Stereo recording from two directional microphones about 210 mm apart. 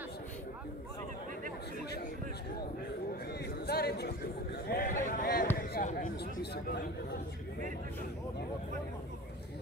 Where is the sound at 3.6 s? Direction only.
50° left (ahead or behind).